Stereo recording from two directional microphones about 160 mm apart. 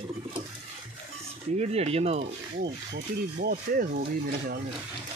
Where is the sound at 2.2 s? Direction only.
80° right; by 4.6 s 65° right (ahead or behind).